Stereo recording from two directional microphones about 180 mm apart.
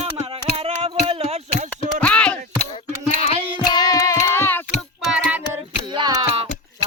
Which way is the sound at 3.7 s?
20° left (ahead or behind).